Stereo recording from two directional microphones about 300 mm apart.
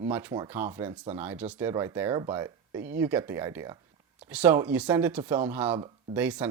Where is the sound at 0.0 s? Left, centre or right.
Centre.